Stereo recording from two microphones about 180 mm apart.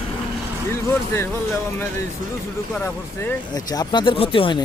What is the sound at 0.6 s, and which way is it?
Speech, 15° left (ahead or behind).